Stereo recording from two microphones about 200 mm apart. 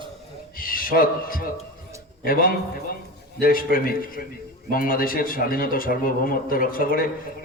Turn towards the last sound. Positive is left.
turn(degrees=45)  # may be behind; listen again after turning